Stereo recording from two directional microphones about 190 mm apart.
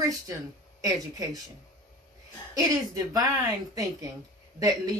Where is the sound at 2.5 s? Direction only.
20° right (ahead or behind).